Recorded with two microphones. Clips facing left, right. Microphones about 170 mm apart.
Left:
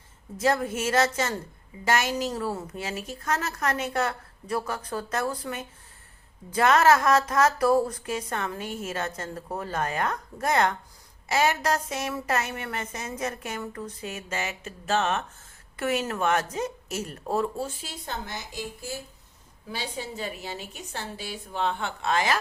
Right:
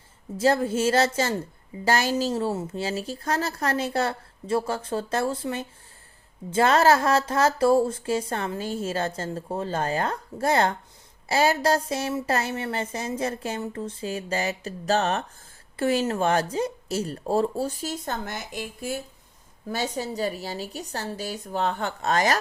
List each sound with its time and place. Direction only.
0.3 s speech: 30° right (ahead or behind); by 18.9 s 55° right (ahead or behind)
19.6 s speech: 45° right (ahead or behind)